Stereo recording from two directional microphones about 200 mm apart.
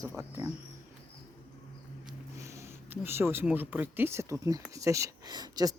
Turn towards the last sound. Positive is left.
turn(degrees=-20)  # may be behind; listen again after turning